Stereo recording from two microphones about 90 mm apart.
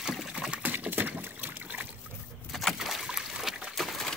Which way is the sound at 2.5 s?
Centre (ahead or behind).